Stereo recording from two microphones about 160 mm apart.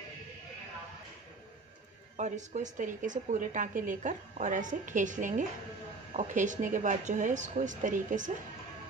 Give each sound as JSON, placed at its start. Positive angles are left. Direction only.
{"t": 2.1, "sound": "a woman's voice", "side_deg": -50}